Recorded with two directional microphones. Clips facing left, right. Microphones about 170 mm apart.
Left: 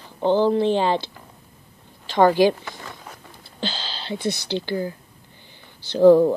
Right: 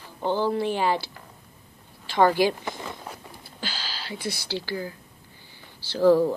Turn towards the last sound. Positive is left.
turn(degrees=20)  # may be behind; listen again after turning